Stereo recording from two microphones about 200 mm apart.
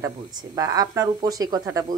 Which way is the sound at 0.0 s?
20° right (ahead or behind).